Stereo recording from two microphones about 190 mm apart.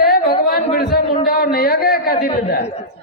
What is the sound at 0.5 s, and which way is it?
Chatter, 50° left (ahead or behind).